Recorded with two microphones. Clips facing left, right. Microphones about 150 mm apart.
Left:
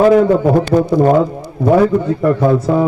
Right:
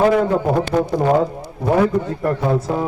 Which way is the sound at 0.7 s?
40° left (ahead or behind).